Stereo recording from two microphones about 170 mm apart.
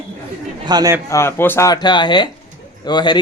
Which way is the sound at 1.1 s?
15° left (ahead or behind).